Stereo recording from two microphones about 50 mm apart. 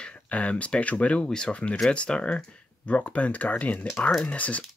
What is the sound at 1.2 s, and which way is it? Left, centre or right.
Speech, centre.